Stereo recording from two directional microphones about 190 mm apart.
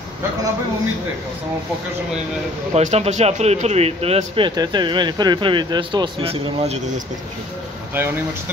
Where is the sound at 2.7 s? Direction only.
35° right (ahead or behind).